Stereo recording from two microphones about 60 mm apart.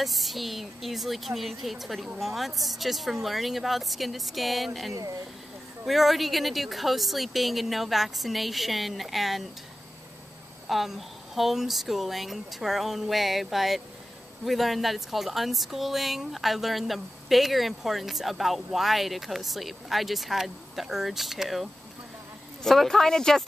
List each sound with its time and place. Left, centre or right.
0.0 s speech: centre
10.7 s speech: centre